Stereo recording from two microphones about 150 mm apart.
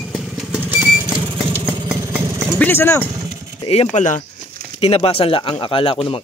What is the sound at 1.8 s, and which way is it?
Vehicle, 15° right (ahead or behind).